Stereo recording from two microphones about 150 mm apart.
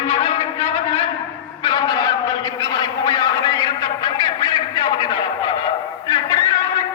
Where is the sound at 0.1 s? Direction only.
40° left (ahead or behind).